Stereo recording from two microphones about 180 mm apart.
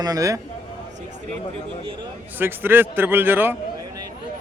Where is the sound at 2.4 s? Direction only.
10° right (ahead or behind).